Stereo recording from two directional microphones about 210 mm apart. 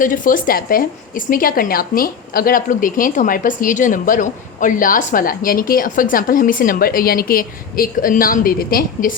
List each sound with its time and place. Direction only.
0.0 s speech: 40° left (ahead or behind)